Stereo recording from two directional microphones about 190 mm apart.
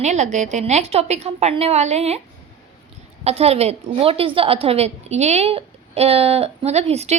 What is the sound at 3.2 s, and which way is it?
A woman's voice, 30° right (ahead or behind).